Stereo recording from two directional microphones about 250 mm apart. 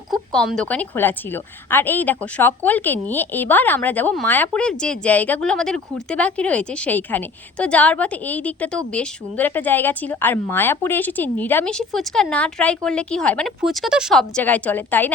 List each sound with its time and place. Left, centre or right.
0.1 s a woman's voice: centre